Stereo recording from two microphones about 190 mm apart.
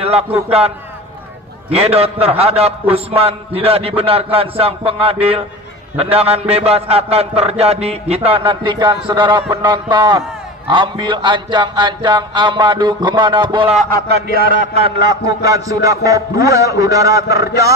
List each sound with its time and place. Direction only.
0.0 s a man's voice: 30° right (ahead or behind)
10.7 s a sound: 25° right (ahead or behind)
13.8 s a man's voice: 50° right (ahead or behind); by 17.5 s 15° right (ahead or behind)